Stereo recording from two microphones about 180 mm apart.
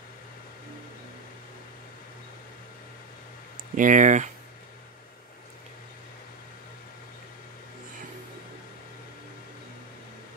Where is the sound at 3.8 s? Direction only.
45° right (ahead or behind).